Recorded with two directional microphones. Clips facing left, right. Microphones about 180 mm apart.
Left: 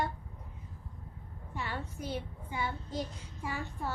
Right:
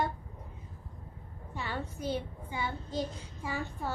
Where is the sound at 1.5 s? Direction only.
30° right (ahead or behind).